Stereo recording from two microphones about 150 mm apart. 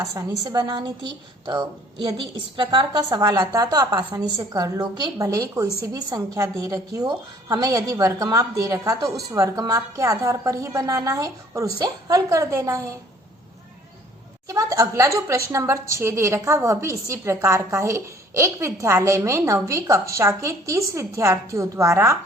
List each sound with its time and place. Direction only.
0.0 s speech: 20° right (ahead or behind)
14.4 s speech: 20° right (ahead or behind)